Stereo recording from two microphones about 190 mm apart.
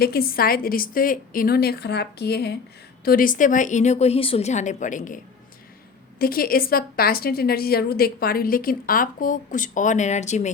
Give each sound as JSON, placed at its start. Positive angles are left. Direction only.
{"t": 0.0, "sound": "a woman's voice", "side_deg": 55}
{"t": 3.0, "sound": "a woman's voice", "side_deg": 50}